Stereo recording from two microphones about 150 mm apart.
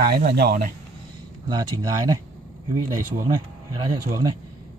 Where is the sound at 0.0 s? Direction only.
90° right.